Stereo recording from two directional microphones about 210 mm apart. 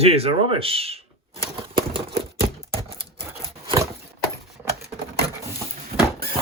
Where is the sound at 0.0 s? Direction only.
30° right (ahead or behind).